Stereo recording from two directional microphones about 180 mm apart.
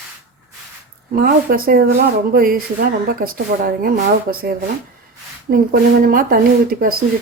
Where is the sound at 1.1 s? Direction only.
55° right (ahead or behind).